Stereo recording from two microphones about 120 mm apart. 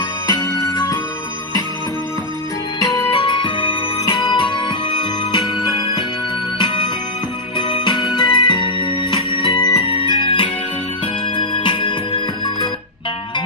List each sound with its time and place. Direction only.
0.3 s music: 35° left (ahead or behind)
3.3 s music: 45° left (ahead or behind)
7.8 s music: 40° left (ahead or behind)
9.8 s music: 50° left (ahead or behind)